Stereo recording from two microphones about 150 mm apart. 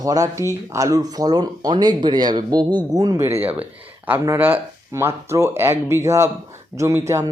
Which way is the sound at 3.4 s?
10° right (ahead or behind).